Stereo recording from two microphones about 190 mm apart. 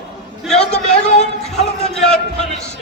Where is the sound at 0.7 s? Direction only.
35° left (ahead or behind).